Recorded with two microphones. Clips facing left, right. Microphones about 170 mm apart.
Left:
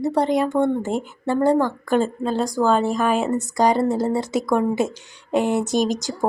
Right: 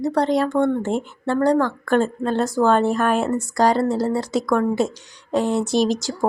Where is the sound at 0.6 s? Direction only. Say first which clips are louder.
Right 1 dB; 20° left (ahead or behind).